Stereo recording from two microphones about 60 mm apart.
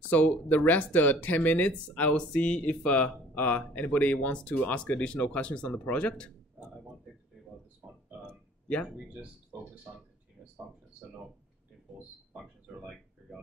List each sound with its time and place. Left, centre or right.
0.1 s speech: left
9.9 s speech: right